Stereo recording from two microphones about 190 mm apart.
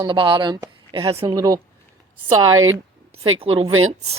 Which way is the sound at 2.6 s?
90° right.